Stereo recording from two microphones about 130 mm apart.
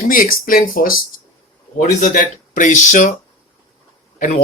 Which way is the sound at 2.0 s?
75° left (ahead or behind).